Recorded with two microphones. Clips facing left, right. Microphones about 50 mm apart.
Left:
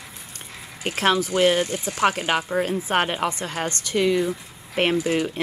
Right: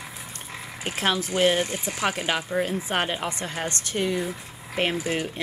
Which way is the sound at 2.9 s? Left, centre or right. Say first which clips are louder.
Left 6 dB; left.